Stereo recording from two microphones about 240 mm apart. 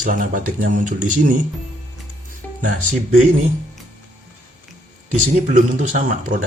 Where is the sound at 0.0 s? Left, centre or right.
Right.